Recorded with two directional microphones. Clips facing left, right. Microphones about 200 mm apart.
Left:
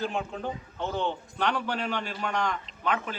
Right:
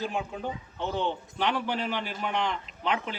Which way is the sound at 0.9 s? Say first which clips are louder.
Right 1 dB; 15° right (ahead or behind).